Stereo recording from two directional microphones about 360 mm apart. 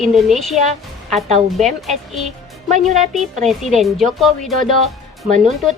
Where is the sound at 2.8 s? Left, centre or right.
Centre.